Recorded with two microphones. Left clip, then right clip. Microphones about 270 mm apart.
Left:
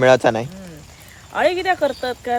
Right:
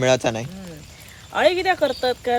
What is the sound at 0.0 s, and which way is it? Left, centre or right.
Speech, left.